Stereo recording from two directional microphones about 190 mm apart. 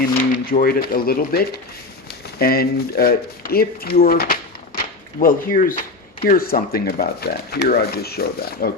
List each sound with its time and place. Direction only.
0.0 s speech: 45° left (ahead or behind)